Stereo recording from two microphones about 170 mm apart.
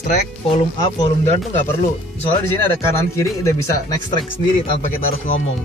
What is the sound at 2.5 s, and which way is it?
Speech, 15° left (ahead or behind).